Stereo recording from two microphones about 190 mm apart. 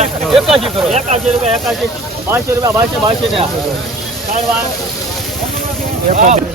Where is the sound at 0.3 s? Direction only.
Centre (ahead or behind).